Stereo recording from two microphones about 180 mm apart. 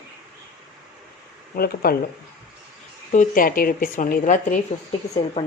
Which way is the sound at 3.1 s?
50° left (ahead or behind).